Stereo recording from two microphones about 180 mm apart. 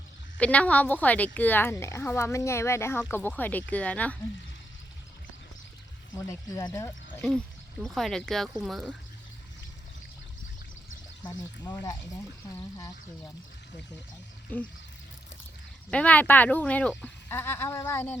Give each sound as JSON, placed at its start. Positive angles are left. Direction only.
{"t": 0.3, "sound": "speech", "side_deg": 5}
{"t": 6.1, "sound": "speech", "side_deg": 15}
{"t": 12.5, "sound": "speech", "side_deg": 20}
{"t": 14.5, "sound": "speech", "side_deg": 10}
{"t": 15.9, "sound": "speech", "side_deg": 5}